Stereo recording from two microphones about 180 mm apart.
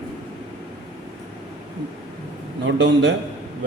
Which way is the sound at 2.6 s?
90° right.